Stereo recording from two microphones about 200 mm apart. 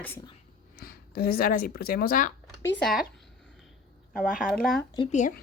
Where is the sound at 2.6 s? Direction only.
15° left (ahead or behind).